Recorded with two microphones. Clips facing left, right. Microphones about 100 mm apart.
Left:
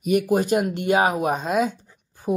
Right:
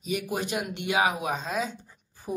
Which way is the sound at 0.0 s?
55° left (ahead or behind).